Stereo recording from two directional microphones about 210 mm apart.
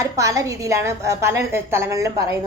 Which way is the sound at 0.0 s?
15° right (ahead or behind).